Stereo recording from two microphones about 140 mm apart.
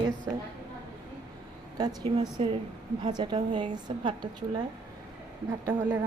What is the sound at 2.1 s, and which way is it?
Speech, 45° right (ahead or behind).